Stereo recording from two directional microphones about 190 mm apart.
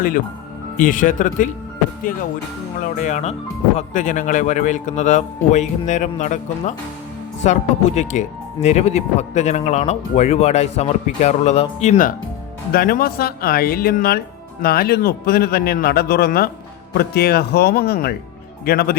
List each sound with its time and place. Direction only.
0.8 s a man's voice: 45° left (ahead or behind)
3.0 s a man's voice: 40° left (ahead or behind); by 18.9 s 55° left (ahead or behind)